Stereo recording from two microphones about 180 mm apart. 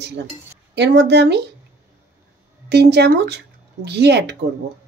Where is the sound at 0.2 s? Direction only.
65° right (ahead or behind).